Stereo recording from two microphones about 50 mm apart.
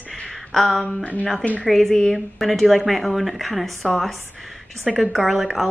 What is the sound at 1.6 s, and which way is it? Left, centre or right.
Speech, centre.